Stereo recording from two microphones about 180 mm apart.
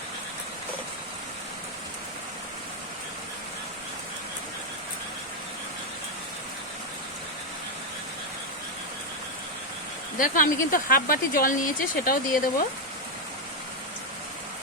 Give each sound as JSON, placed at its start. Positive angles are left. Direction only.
{"t": 10.2, "sound": "speech", "side_deg": 50}